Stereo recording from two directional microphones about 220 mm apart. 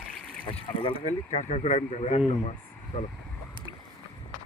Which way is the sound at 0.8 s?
25° left (ahead or behind).